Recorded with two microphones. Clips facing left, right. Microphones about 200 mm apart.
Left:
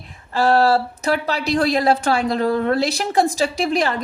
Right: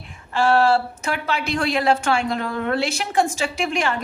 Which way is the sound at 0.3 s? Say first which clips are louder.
Left 1 dB; 35° left (ahead or behind).